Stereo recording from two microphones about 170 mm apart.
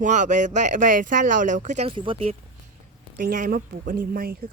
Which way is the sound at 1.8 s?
30° right (ahead or behind).